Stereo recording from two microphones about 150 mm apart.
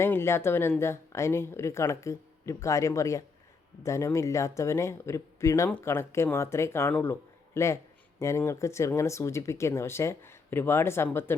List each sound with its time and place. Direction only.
0.0 s speech: 15° left (ahead or behind)